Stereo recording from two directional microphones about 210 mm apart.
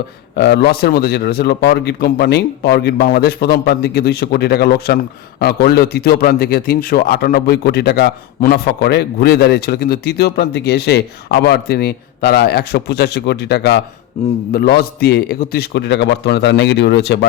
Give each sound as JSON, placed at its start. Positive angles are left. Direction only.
{"t": 0.3, "sound": "a man's voice", "side_deg": 55}
{"t": 14.2, "sound": "a man's voice", "side_deg": 30}
{"t": 14.5, "sound": "a man's voice", "side_deg": 45}